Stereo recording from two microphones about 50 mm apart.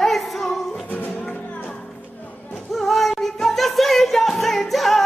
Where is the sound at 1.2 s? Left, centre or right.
Left.